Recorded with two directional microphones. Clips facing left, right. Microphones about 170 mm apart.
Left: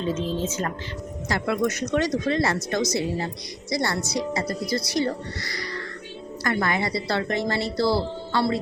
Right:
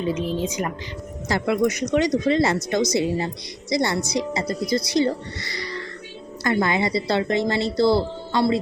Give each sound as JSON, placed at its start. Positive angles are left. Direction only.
{"t": 0.0, "sound": "a woman's voice", "side_deg": -15}